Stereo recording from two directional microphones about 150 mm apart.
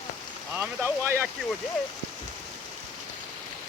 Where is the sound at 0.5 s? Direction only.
10° right (ahead or behind).